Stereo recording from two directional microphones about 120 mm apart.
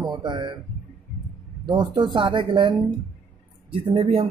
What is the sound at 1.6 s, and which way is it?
A woman's voice, 40° right (ahead or behind).